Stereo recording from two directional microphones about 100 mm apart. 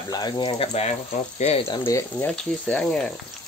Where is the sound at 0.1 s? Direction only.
45° left (ahead or behind).